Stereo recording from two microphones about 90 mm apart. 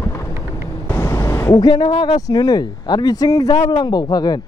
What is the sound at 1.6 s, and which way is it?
Speech, 55° left (ahead or behind).